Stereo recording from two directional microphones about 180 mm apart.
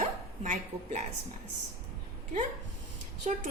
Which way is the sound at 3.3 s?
40° right (ahead or behind).